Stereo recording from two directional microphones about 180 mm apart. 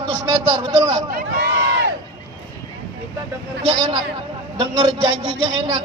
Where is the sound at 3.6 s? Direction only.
30° right (ahead or behind).